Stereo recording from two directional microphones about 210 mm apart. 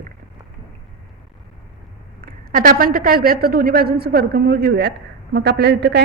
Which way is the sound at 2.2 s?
40° right (ahead or behind).